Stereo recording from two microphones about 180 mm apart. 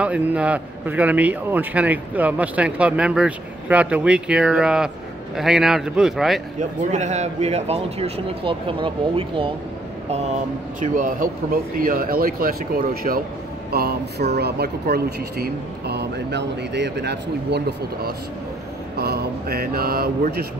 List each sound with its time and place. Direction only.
0.0 s a man's voice: 5° right (ahead or behind)
6.9 s speech: 40° right (ahead or behind)
10.8 s speech: 50° right (ahead or behind)